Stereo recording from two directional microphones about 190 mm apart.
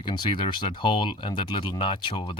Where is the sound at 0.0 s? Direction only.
25° left (ahead or behind).